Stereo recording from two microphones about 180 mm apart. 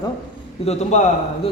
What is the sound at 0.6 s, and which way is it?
Speech, 40° left (ahead or behind).